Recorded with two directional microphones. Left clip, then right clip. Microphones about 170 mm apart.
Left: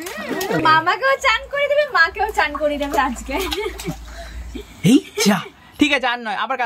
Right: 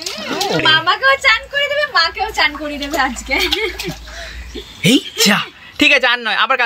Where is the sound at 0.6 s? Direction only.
30° left (ahead or behind).